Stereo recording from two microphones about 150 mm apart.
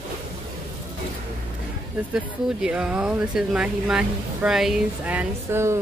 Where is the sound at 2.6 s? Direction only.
5° right (ahead or behind).